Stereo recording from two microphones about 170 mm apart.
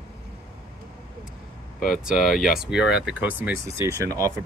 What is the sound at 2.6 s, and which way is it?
Speech, 5° right (ahead or behind).